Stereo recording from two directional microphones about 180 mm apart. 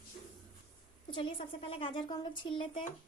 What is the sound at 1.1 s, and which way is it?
Speech, 30° left (ahead or behind).